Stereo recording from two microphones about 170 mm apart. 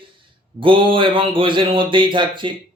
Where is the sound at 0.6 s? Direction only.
30° right (ahead or behind).